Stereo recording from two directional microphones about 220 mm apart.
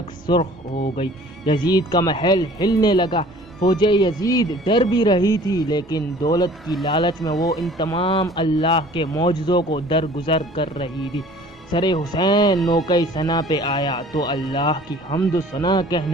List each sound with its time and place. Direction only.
0.3 s a man's voice: 20° left (ahead or behind)